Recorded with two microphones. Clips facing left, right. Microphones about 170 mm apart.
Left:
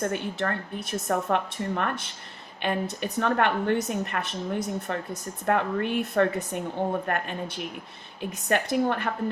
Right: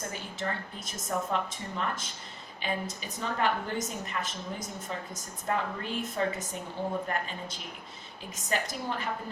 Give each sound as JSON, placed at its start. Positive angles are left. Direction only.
{"t": 0.0, "sound": "a woman's voice", "side_deg": 65}